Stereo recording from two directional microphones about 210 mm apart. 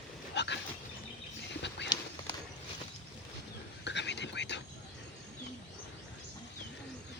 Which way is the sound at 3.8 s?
55° left (ahead or behind).